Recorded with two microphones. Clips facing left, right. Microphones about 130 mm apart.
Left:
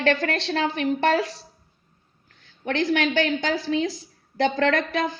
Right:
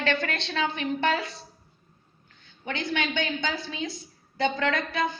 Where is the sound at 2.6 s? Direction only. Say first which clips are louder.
Left 7 dB; 90° left.